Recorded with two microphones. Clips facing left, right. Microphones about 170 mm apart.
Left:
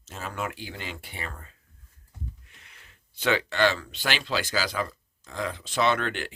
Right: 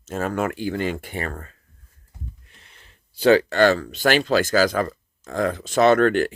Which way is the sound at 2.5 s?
30° right (ahead or behind).